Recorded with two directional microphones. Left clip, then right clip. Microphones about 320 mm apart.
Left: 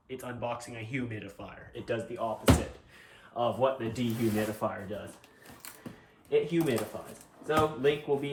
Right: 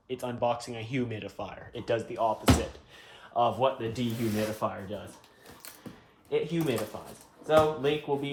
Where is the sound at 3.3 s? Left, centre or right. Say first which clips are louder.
Right 2 dB; centre.